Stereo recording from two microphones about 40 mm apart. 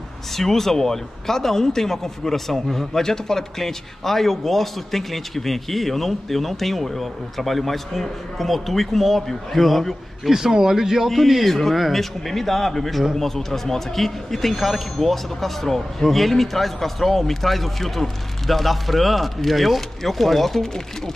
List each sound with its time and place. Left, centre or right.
0.3 s speech: centre
10.3 s speech: centre
11.1 s speech: centre